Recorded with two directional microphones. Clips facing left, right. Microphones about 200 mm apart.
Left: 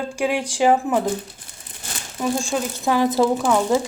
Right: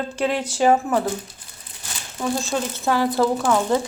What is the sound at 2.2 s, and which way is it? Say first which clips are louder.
Speech: left 1 dB; 10° left (ahead or behind).